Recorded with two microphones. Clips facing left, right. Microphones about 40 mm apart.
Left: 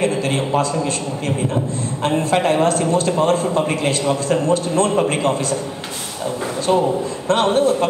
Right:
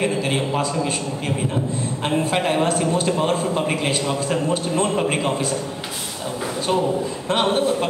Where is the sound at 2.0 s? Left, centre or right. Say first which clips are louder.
Left 4 dB; centre.